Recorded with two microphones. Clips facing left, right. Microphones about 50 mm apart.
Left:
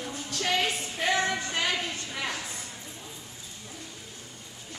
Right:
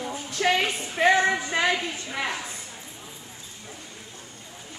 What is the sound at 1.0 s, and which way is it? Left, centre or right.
Music, right.